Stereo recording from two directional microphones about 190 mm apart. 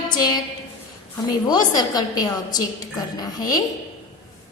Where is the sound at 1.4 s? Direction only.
20° left (ahead or behind).